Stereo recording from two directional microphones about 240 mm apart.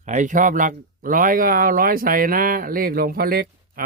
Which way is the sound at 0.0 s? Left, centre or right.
Right.